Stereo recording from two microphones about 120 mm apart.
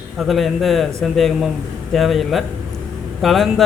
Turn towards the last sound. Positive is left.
turn(degrees=0)  # may be behind; listen again after turning